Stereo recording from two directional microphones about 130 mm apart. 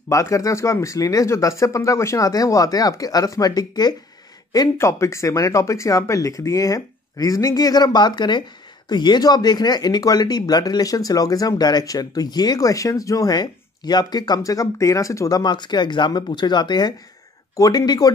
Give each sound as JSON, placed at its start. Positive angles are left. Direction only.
{"t": 0.1, "sound": "speech", "side_deg": 25}